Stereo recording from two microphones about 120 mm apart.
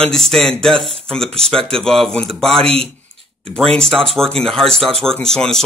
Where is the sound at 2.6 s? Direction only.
55° right (ahead or behind).